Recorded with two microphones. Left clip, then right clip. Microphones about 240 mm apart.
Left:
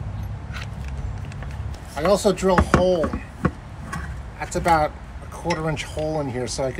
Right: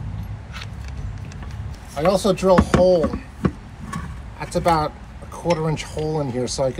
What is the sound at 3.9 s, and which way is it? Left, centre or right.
Vehicle, centre.